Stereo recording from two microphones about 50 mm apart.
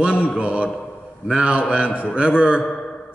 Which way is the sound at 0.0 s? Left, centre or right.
Centre.